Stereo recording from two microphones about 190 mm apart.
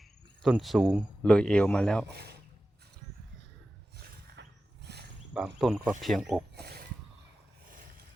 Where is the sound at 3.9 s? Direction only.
55° right (ahead or behind).